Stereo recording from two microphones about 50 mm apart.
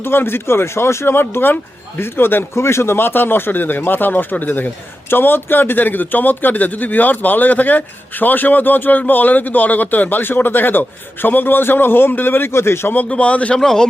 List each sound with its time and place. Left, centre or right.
0.0 s speech: left
1.0 s speech: left
5.0 s a man's voice: left
12.5 s speech: left
13.1 s a man's voice: left
13.6 s a man's voice: centre